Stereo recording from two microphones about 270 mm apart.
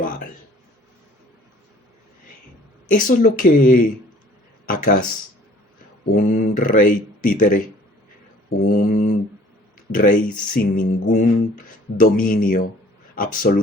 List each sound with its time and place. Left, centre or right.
2.9 s speech: left
6.1 s speech: left
8.9 s speech: left